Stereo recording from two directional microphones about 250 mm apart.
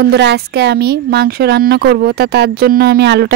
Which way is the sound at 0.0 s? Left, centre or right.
Right.